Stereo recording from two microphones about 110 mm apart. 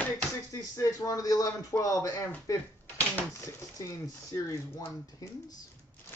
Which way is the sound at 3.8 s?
30° left (ahead or behind).